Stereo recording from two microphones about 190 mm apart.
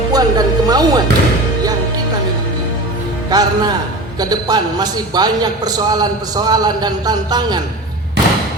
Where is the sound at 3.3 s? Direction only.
20° right (ahead or behind).